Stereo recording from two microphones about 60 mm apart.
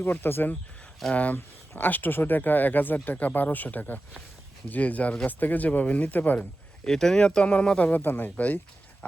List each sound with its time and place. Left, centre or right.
0.0 s speech: left
1.1 s speech: left
6.4 s speech: centre
7.9 s speech: left